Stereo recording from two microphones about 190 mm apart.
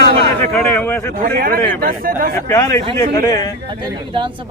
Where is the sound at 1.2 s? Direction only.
50° right (ahead or behind).